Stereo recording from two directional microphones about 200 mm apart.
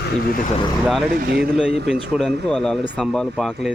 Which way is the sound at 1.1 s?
50° right (ahead or behind).